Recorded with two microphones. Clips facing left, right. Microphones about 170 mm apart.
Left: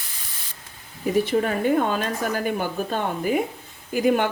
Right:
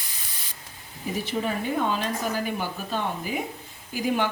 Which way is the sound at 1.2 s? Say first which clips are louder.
Left 6 dB; 50° left (ahead or behind).